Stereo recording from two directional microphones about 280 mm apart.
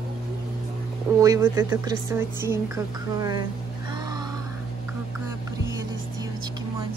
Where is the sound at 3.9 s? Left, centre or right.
Centre.